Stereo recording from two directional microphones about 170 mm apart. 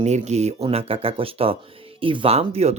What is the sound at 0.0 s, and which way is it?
Speech, 40° right (ahead or behind).